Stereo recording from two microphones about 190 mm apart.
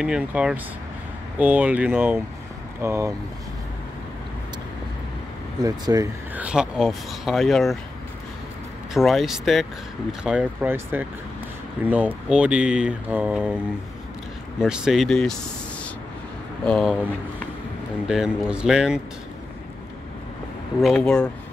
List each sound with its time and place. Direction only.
0.0 s speech: 5° right (ahead or behind)
5.6 s speech: 20° right (ahead or behind)
6.3 s speech: 5° right (ahead or behind)
8.9 s speech: centre (ahead or behind)
14.6 s speech: centre (ahead or behind)
16.6 s speech: 5° left (ahead or behind)
18.0 s speech: 5° right (ahead or behind)
20.8 s speech: 5° left (ahead or behind)